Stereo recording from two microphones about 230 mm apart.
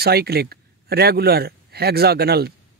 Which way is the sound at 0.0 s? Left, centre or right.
Right.